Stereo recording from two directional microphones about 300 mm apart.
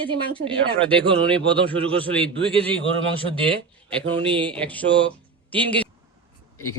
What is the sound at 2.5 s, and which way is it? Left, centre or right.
Speech, centre.